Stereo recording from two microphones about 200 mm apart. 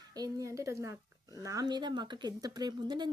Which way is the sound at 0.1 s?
20° right (ahead or behind).